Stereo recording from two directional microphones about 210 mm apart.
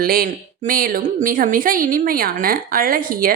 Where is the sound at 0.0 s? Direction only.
45° right (ahead or behind).